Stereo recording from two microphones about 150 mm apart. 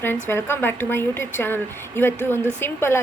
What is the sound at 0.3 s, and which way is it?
A woman's voice, 15° left (ahead or behind).